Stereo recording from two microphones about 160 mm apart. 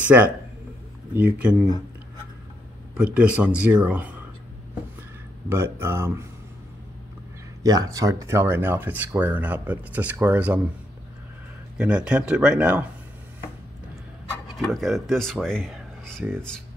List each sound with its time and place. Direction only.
0.0 s speech: 10° right (ahead or behind)
3.0 s speech: 10° right (ahead or behind)
5.5 s speech: 15° right (ahead or behind)
7.6 s speech: 25° right (ahead or behind)
11.8 s speech: 5° right (ahead or behind)
14.5 s speech: centre (ahead or behind)
15.7 s a sound: 5° left (ahead or behind)